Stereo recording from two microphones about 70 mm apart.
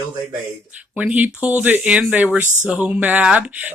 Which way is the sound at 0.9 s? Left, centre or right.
Right.